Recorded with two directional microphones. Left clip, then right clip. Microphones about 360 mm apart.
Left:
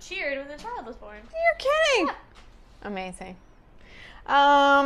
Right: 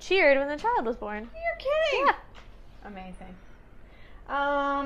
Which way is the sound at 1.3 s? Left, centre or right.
Left.